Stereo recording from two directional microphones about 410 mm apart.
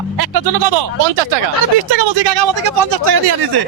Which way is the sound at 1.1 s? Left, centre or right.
Right.